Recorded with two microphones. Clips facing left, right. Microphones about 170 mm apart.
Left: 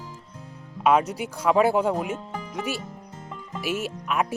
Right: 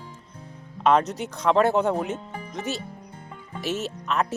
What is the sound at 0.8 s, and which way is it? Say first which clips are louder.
Speech: even; 10° left (ahead or behind).